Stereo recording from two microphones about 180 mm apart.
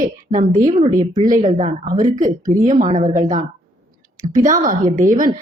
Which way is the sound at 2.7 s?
45° right (ahead or behind).